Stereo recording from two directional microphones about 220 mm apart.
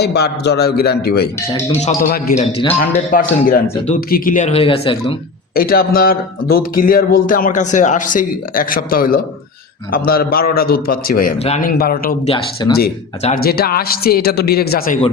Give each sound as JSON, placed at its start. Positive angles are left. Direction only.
{"t": 0.0, "sound": "a man's voice", "side_deg": 50}
{"t": 3.1, "sound": "a man's voice", "side_deg": 40}
{"t": 5.5, "sound": "a man's voice", "side_deg": 40}
{"t": 11.8, "sound": "speech", "side_deg": 45}
{"t": 12.2, "sound": "speech", "side_deg": 25}
{"t": 13.2, "sound": "speech", "side_deg": 40}